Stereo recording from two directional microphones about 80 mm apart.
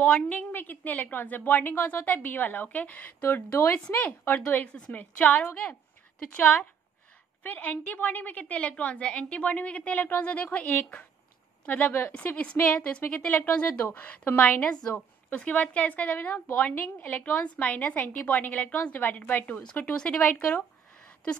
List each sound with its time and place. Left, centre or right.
0.1 s a woman's voice: centre